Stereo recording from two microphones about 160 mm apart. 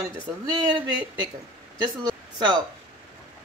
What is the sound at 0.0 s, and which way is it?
Speech, 25° right (ahead or behind).